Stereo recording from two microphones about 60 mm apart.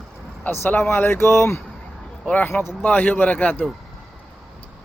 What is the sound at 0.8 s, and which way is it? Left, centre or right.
Speech, left.